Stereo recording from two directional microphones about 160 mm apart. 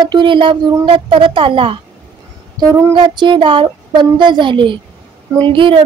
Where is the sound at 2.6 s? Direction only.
20° right (ahead or behind).